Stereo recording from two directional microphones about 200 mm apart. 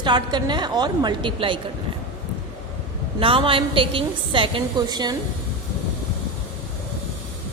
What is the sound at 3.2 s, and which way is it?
A woman's voice, 25° right (ahead or behind).